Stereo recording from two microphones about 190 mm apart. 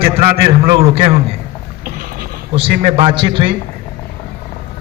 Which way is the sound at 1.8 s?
45° right (ahead or behind).